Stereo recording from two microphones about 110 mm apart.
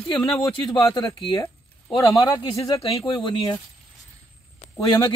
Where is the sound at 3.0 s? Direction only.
50° left (ahead or behind).